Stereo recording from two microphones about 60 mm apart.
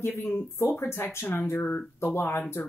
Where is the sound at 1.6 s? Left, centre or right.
Left.